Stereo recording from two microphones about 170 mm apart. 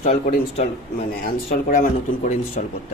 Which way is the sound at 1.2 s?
55° left (ahead or behind).